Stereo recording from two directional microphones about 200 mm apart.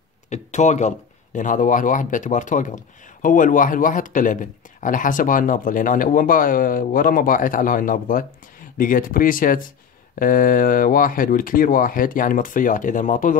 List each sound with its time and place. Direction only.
0.3 s speech: 35° left (ahead or behind)